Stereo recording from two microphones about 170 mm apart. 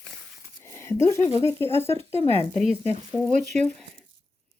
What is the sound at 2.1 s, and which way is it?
Speech, 35° right (ahead or behind).